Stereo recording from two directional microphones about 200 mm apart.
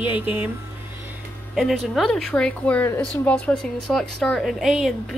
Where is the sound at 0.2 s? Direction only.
10° right (ahead or behind).